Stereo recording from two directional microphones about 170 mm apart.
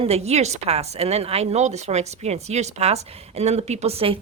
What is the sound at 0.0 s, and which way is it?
Speech, 40° right (ahead or behind).